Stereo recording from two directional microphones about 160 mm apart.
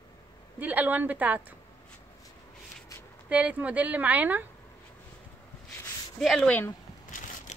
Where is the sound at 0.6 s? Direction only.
10° right (ahead or behind).